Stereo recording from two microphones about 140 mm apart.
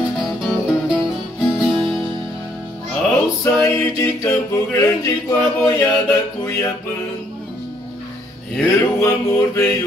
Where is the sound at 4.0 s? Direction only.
20° left (ahead or behind).